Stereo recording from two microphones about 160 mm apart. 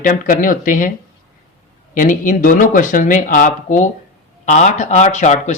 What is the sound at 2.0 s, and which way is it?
Speech, 55° left (ahead or behind).